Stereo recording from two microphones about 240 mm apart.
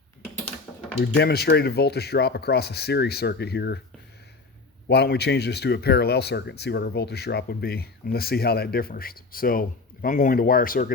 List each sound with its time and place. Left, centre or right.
0.9 s speech: left
4.9 s speech: left